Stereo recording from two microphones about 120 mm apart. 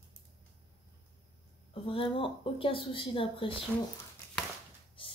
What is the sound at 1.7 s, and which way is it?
A woman's voice, 50° left (ahead or behind).